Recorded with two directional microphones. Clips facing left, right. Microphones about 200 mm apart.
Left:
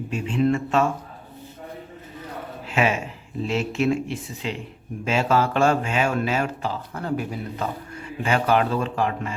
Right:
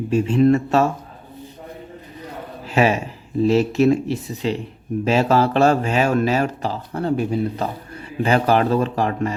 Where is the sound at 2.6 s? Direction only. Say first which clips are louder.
Right 5 dB; 35° right (ahead or behind).